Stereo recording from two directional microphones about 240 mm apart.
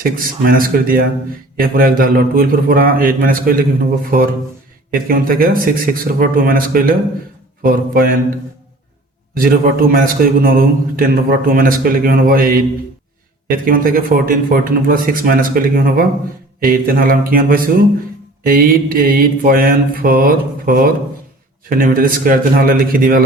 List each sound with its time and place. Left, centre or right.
0.0 s a man's voice: right
4.9 s a man's voice: right
9.3 s a man's voice: right
13.7 s a man's voice: right